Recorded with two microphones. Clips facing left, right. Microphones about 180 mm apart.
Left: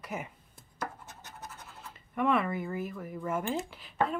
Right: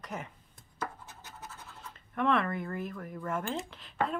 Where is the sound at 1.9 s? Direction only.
5° left (ahead or behind).